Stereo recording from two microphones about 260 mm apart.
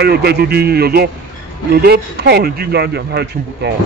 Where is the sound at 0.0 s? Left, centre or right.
Right.